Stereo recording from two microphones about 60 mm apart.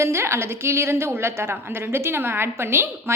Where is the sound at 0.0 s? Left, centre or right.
Right.